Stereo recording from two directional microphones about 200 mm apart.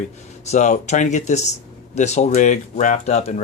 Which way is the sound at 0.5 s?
35° left (ahead or behind).